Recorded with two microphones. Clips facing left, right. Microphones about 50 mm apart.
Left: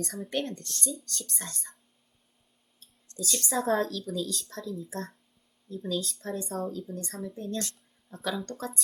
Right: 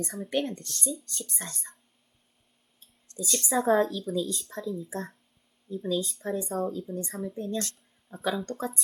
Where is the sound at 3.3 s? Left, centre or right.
Centre.